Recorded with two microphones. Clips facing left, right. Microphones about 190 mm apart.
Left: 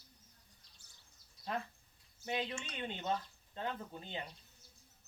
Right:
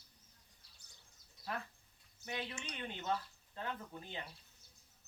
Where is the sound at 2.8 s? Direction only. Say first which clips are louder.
Left 1 dB; 25° left (ahead or behind).